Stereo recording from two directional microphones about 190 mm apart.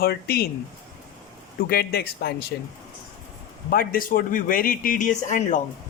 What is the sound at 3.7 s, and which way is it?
Speech, 50° left (ahead or behind).